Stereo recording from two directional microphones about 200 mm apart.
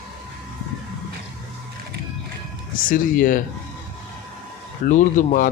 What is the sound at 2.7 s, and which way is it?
Speech, 45° left (ahead or behind).